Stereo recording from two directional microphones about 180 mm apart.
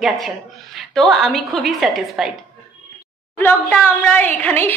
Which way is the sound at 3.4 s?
10° left (ahead or behind).